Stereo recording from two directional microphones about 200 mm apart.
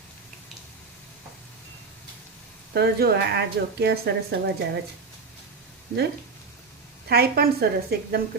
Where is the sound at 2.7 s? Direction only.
50° right (ahead or behind).